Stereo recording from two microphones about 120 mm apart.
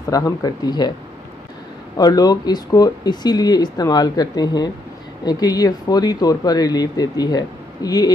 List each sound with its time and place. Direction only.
0.1 s speech: 30° left (ahead or behind)
2.0 s speech: 30° left (ahead or behind)